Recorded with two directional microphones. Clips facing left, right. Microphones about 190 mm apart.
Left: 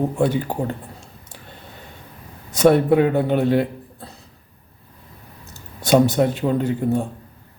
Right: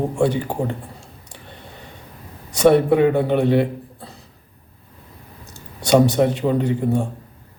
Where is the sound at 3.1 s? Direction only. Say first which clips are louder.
Right 1 dB; centre (ahead or behind).